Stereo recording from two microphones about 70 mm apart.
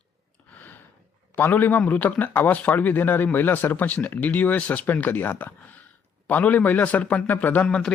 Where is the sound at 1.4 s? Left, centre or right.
Left.